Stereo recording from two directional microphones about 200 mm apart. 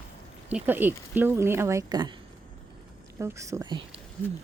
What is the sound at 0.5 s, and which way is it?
Speech, 10° right (ahead or behind).